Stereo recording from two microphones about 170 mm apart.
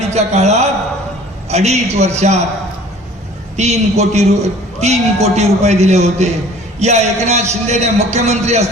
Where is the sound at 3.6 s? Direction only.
40° right (ahead or behind).